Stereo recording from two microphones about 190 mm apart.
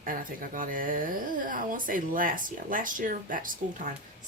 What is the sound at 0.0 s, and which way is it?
Speech, 45° right (ahead or behind).